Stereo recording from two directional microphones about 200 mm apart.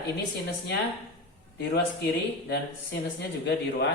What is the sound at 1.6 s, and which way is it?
Speech, 55° left (ahead or behind).